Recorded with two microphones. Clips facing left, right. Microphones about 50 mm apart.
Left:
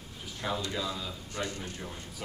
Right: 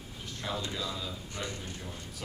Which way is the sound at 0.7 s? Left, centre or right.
Centre.